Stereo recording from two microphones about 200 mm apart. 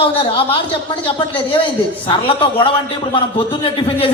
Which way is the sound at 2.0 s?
25° left (ahead or behind).